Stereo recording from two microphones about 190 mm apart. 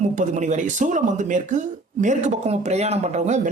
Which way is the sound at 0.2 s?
40° right (ahead or behind).